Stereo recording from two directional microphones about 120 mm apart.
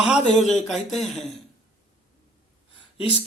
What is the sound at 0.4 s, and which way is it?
Speech, centre (ahead or behind).